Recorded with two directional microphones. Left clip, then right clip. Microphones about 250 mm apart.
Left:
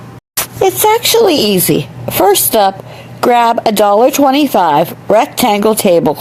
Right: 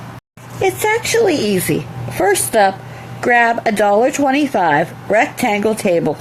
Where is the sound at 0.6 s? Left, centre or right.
Left.